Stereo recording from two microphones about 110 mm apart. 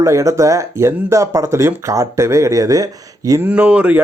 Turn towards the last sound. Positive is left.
turn(degrees=-10)  # may be behind; listen again after turning